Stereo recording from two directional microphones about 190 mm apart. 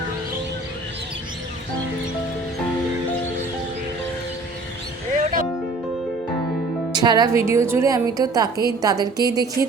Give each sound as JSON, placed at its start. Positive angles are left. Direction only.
{"t": 5.1, "sound": "music", "side_deg": -45}
{"t": 6.9, "sound": "a woman's voice", "side_deg": -20}